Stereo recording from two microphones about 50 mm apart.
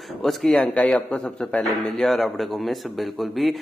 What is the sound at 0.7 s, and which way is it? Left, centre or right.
Speech, left.